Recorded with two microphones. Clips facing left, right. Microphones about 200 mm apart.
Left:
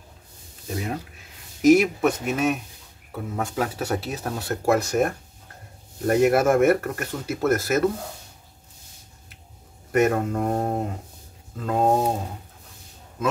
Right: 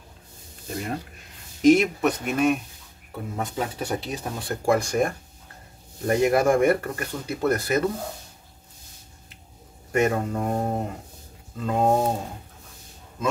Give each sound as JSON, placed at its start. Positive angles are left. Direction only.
{"t": 0.7, "sound": "speech", "side_deg": 5}
{"t": 9.9, "sound": "speech", "side_deg": 5}